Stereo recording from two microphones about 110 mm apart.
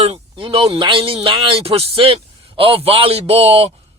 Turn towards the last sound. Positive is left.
turn(degrees=-65)  # may be behind; listen again after turning